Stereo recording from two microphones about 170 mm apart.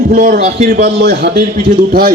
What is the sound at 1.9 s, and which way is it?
Speech, 60° right (ahead or behind).